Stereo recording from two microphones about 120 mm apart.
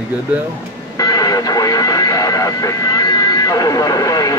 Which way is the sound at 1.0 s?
30° left (ahead or behind).